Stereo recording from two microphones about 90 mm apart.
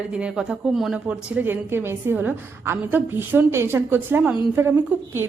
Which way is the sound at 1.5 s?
25° right (ahead or behind).